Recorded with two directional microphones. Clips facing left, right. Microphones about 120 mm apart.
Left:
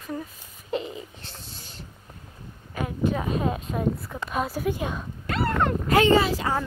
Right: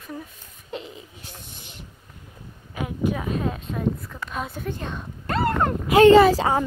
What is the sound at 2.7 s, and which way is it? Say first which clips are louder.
Speech: even; 15° right (ahead or behind).